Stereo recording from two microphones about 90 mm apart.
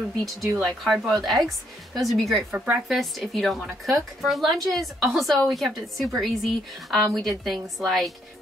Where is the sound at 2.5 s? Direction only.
15° right (ahead or behind).